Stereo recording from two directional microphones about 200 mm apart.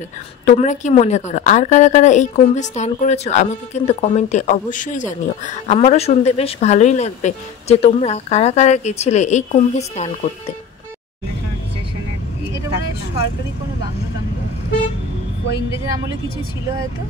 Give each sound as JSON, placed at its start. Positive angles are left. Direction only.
{"t": 0.5, "sound": "a woman's voice", "side_deg": 35}